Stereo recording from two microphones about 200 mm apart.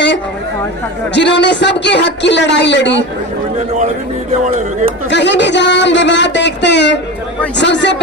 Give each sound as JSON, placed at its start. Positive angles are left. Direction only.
{"t": 1.1, "sound": "speech", "side_deg": 60}
{"t": 3.5, "sound": "a man's voice", "side_deg": -35}
{"t": 5.1, "sound": "speech", "side_deg": 60}